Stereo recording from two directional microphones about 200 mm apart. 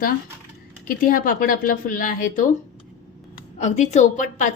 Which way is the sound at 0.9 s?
45° left (ahead or behind).